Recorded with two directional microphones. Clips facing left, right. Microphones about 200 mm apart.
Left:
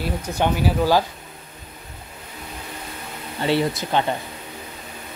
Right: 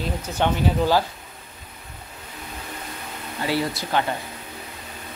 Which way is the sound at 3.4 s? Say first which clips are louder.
Left 4 dB; 25° left (ahead or behind).